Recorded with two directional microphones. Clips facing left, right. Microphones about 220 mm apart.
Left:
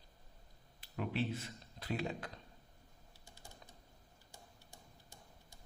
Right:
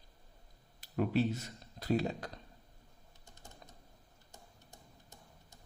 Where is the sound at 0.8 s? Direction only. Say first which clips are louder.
Right 7 dB; 40° right (ahead or behind).